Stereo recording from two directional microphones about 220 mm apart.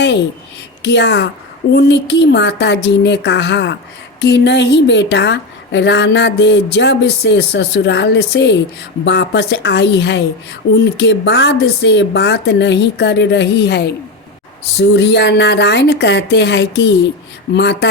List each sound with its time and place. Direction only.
0.8 s a woman's voice: 50° left (ahead or behind)